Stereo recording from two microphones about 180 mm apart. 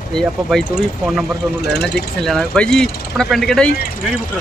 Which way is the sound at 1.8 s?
5° left (ahead or behind).